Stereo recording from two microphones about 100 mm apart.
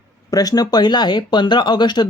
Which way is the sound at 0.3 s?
40° left (ahead or behind).